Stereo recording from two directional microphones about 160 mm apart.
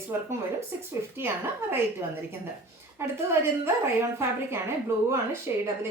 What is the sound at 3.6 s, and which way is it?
Speech, 15° right (ahead or behind).